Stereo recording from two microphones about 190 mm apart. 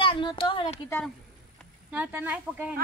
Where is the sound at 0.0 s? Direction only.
25° left (ahead or behind).